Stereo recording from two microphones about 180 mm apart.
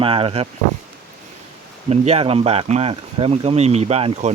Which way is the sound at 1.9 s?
35° right (ahead or behind).